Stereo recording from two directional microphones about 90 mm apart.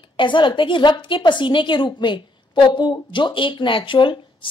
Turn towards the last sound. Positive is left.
turn(degrees=70)  # may be behind; listen again after turning